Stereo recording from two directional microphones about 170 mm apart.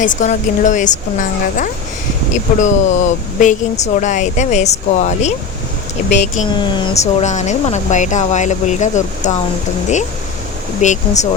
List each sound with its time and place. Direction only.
0.0 s speech: 45° left (ahead or behind)
6.6 s speech: 25° left (ahead or behind)
7.0 s speech: 45° left (ahead or behind)
10.8 s speech: 45° left (ahead or behind)